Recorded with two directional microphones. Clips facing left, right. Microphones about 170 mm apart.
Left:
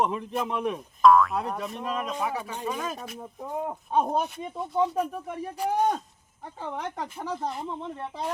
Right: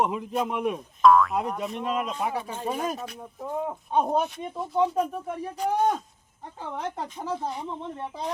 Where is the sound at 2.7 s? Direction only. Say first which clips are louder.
Right 4 dB; 40° right (ahead or behind).